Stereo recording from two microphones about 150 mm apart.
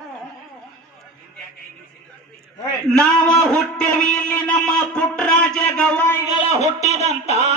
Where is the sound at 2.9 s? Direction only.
5° left (ahead or behind).